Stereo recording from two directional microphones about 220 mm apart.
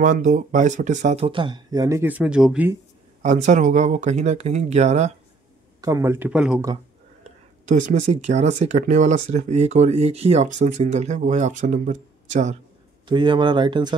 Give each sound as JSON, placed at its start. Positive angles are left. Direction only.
{"t": 0.0, "sound": "speech", "side_deg": -35}
{"t": 3.2, "sound": "speech", "side_deg": -35}
{"t": 5.8, "sound": "speech", "side_deg": -15}
{"t": 7.6, "sound": "speech", "side_deg": -30}
{"t": 13.1, "sound": "speech", "side_deg": -20}